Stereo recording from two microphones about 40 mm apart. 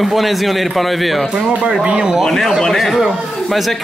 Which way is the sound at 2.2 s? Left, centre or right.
Centre.